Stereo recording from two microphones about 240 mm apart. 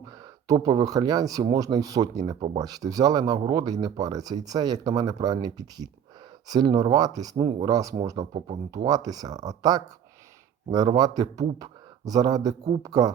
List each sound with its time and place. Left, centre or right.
0.0 s speech: centre